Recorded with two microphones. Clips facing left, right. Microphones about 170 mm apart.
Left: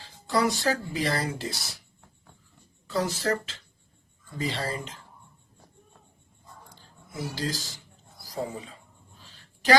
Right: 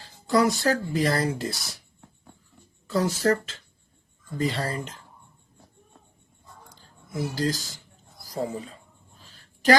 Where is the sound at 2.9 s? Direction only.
45° right (ahead or behind).